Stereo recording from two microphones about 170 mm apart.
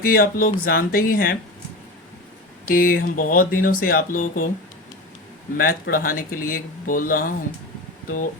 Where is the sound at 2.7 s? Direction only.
55° left (ahead or behind).